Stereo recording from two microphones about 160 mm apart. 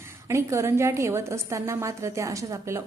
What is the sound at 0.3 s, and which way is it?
A woman's voice, 15° right (ahead or behind).